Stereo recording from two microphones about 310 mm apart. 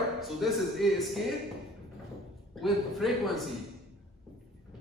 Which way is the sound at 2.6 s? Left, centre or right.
Centre.